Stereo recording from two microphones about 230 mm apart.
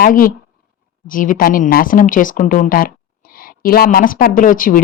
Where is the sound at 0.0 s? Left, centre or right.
Left.